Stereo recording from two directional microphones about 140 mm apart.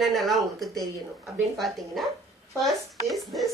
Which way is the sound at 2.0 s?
Centre (ahead or behind).